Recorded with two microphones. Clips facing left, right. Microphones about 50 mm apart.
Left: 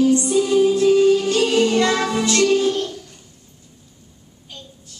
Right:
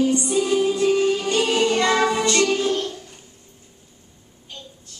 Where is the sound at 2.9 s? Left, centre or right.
Right.